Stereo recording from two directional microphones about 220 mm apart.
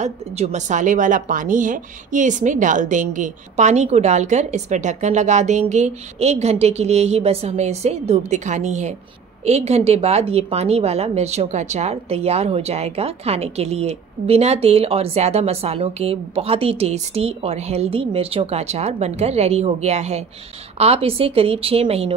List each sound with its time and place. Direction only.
0.0 s a woman's voice: 30° right (ahead or behind)